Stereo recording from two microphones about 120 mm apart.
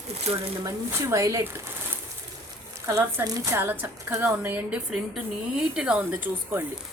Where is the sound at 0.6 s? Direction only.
25° right (ahead or behind).